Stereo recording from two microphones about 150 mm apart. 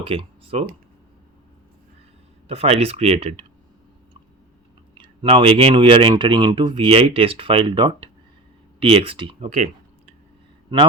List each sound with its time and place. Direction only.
0.0 s speech: 40° right (ahead or behind)
2.5 s speech: 40° right (ahead or behind)
4.9 s speech: 35° right (ahead or behind)